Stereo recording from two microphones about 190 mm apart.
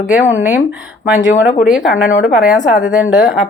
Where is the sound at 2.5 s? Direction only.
40° left (ahead or behind).